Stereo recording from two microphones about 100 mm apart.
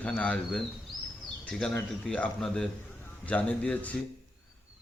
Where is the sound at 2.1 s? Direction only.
10° left (ahead or behind).